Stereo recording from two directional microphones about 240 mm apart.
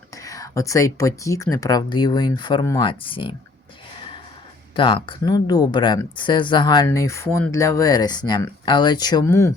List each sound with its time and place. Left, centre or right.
0.2 s speech: centre
4.7 s speech: left